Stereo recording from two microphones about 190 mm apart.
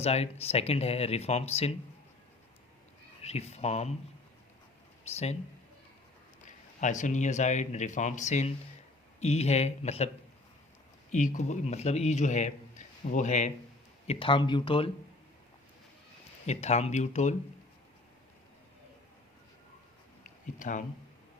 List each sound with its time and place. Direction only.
0.0 s a man's voice: 35° left (ahead or behind)
3.2 s a man's voice: 35° left (ahead or behind)
5.0 s a man's voice: 35° left (ahead or behind)
6.7 s a man's voice: 40° left (ahead or behind)
11.1 s a man's voice: 40° left (ahead or behind)
14.1 s speech: 25° left (ahead or behind)
16.5 s a man's voice: 35° left (ahead or behind)
20.6 s a man's voice: 40° left (ahead or behind)